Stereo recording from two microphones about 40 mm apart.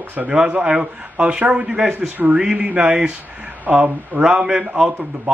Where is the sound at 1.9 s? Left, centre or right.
Right.